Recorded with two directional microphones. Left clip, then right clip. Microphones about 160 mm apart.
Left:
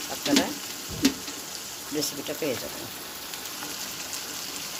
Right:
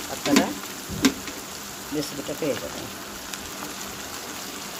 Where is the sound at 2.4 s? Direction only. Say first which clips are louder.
Right 3 dB; 5° left (ahead or behind).